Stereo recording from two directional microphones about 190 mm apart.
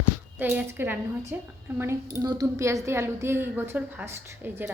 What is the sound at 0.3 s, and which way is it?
A woman's voice, 10° right (ahead or behind).